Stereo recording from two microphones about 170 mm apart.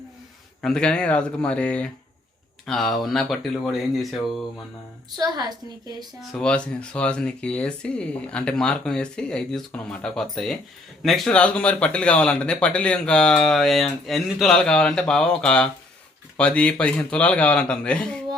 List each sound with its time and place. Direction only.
0.6 s speech: 5° left (ahead or behind)
5.1 s a woman's voice: 25° right (ahead or behind)
6.3 s speech: 5° left (ahead or behind)